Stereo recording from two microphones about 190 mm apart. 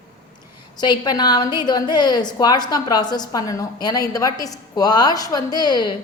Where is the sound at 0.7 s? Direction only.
20° left (ahead or behind).